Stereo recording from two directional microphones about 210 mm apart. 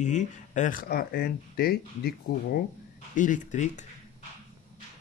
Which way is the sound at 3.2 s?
35° left (ahead or behind).